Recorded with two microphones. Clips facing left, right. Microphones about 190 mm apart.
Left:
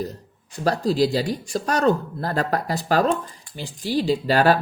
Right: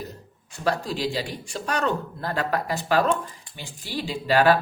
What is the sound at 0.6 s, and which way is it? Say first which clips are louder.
Speech: left 6 dB; 35° left (ahead or behind).